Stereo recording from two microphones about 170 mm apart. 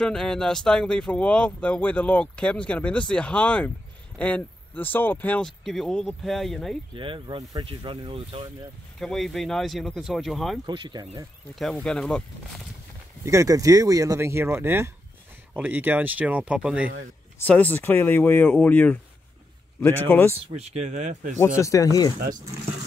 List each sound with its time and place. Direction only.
0.0 s speech: 5° left (ahead or behind)
6.9 s speech: 30° right (ahead or behind)
9.0 s speech: centre (ahead or behind)
10.6 s speech: 25° right (ahead or behind)
11.5 s speech: centre (ahead or behind)
13.2 s speech: 20° right (ahead or behind)
17.4 s speech: 10° left (ahead or behind)
20.5 s speech: 40° right (ahead or behind)
21.4 s speech: 15° left (ahead or behind)